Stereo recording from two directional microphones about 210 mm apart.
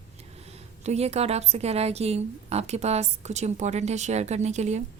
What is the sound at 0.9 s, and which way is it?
Speech, 30° right (ahead or behind).